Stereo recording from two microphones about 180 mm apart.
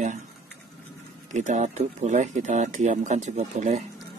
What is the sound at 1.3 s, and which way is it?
Speech, 40° right (ahead or behind).